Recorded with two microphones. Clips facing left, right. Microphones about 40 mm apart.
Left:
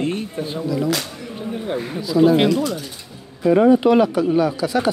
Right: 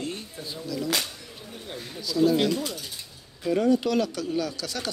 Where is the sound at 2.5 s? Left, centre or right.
Left.